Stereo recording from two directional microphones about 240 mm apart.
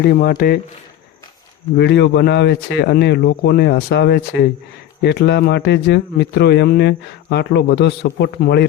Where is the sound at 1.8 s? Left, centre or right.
Left.